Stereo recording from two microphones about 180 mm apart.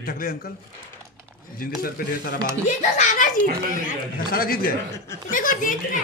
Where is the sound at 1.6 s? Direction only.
55° left (ahead or behind).